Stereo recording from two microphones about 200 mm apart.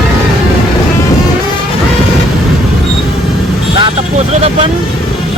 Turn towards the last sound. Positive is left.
turn(degrees=-30)  # may be behind; listen again after turning